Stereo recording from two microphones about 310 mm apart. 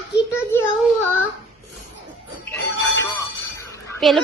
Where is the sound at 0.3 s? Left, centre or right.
Centre.